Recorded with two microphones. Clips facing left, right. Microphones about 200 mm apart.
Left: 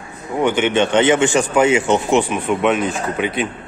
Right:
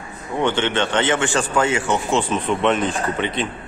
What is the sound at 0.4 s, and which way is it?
Speech, 10° left (ahead or behind).